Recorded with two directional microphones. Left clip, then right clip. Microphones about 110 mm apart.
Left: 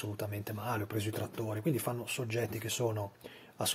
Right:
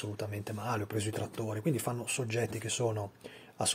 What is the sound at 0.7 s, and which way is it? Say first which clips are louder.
Speech: right 1 dB; 25° right (ahead or behind).